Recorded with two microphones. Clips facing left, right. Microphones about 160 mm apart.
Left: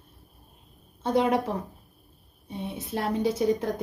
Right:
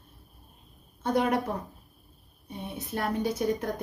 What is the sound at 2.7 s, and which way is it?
Speech, 25° left (ahead or behind).